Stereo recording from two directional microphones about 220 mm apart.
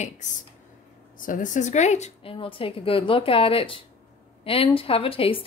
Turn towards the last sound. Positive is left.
turn(degrees=25)  # may be behind; listen again after turning